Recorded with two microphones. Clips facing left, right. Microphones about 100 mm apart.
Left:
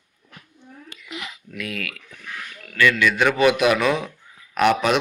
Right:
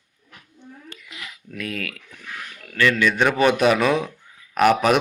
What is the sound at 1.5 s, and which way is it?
Speech, 40° right (ahead or behind).